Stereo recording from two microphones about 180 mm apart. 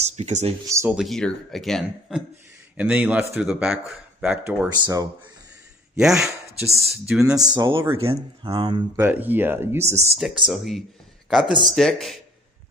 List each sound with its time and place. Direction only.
0.0 s speech: 40° right (ahead or behind)
0.7 s speech: 15° right (ahead or behind)
0.9 s speech: centre (ahead or behind)
4.6 s speech: 25° right (ahead or behind)
5.9 s speech: 5° right (ahead or behind)
7.3 s speech: 20° right (ahead or behind)
8.9 s speech: 10° right (ahead or behind)
10.4 s speech: centre (ahead or behind)